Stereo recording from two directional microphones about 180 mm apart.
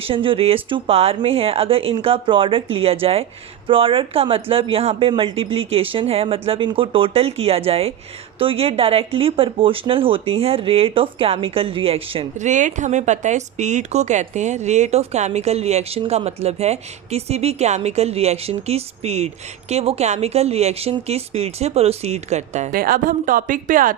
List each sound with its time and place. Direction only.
0.0 s speech: 30° right (ahead or behind); by 24.0 s 50° right (ahead or behind)